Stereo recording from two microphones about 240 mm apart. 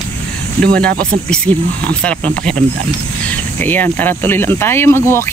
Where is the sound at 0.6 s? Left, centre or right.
Centre.